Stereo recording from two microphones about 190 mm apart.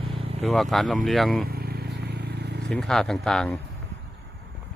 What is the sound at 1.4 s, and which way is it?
Vehicle, 55° right (ahead or behind).